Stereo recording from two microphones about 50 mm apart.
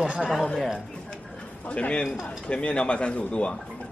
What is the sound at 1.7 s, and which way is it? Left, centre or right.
Speech, left.